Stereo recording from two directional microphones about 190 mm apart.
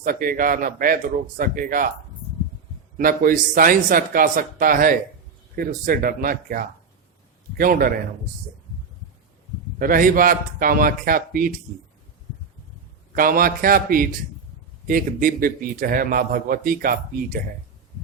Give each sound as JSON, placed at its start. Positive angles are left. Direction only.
{"t": 0.0, "sound": "a man's voice", "side_deg": -50}
{"t": 3.0, "sound": "a man's voice", "side_deg": -50}
{"t": 9.7, "sound": "a man's voice", "side_deg": -50}
{"t": 13.1, "sound": "a man's voice", "side_deg": -50}